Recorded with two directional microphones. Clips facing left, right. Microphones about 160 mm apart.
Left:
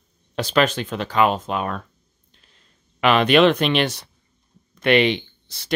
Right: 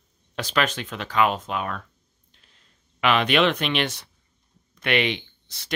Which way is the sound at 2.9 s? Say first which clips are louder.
Left 5 dB; 40° left (ahead or behind).